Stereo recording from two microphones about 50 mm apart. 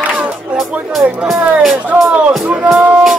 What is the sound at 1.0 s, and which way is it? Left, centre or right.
Speech, centre.